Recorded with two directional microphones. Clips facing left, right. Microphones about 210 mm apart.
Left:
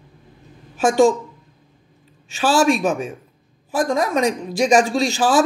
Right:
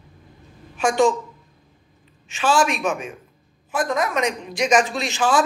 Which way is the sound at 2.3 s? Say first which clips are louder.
Left 4 dB; 35° left (ahead or behind).